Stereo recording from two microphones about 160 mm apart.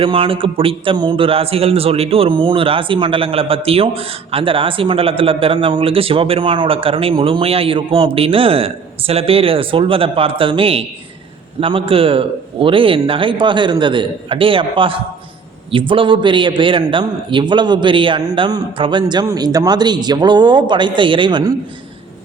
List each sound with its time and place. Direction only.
0.0 s a man's voice: 35° right (ahead or behind)